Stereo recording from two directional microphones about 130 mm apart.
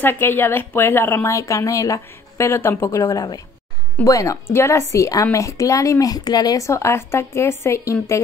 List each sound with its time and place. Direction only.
0.0 s speech: 15° left (ahead or behind)